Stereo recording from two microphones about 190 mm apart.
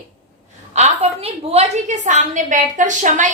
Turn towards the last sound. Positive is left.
turn(degrees=-40)  # may be behind; listen again after turning